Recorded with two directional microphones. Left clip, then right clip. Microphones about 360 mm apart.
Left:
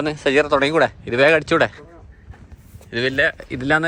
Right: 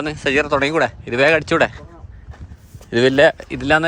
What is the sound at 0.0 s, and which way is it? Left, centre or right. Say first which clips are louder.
Speech: left 1 dB; centre.